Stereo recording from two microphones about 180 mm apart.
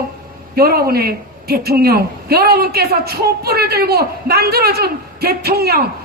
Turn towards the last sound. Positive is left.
turn(degrees=-60)  # may be behind; listen again after turning